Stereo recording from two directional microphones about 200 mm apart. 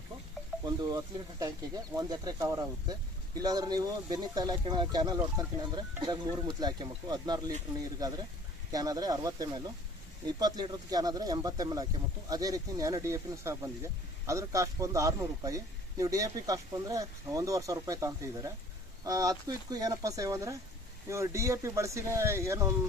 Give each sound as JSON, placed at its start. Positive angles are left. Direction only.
{"t": 0.6, "sound": "speech", "side_deg": -20}